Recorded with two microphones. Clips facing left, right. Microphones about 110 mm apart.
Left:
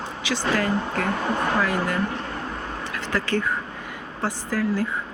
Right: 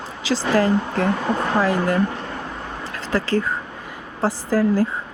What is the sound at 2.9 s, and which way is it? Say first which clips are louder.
Vehicle: right 4 dB; 35° right (ahead or behind).